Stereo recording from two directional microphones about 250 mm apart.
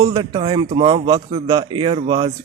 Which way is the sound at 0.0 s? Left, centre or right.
Centre.